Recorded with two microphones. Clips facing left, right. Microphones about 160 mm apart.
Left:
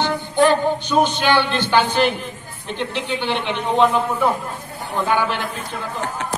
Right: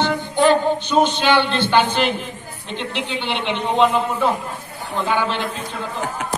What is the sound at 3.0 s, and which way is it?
A woman's voice, 15° right (ahead or behind).